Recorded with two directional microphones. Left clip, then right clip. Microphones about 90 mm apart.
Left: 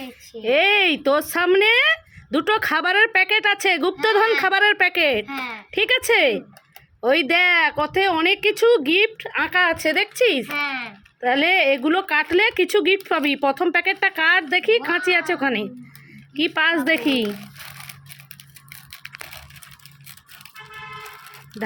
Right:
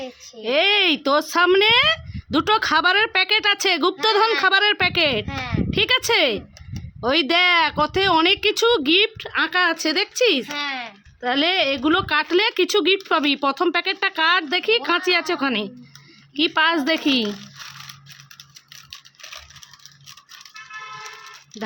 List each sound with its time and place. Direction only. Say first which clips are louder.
0.4 s speech: left 1 dB; 5° right (ahead or behind)
10.6 s speech: left 2 dB; 40° right (ahead or behind)
11.2 s speech: left 2 dB; 5° right (ahead or behind)
11.8 s speech: even; 15° right (ahead or behind)